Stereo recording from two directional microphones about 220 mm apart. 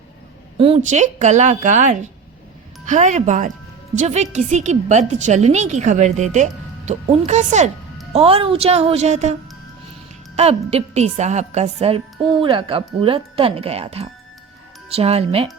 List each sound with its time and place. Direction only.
0.6 s a woman's voice: 30° right (ahead or behind)
10.3 s a woman's voice: 30° right (ahead or behind)